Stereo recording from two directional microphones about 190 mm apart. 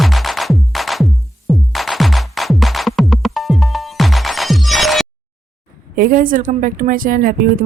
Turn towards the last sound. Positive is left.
turn(degrees=-45)  # may be behind; listen again after turning